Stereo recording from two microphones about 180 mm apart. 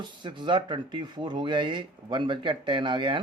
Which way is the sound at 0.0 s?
25° right (ahead or behind).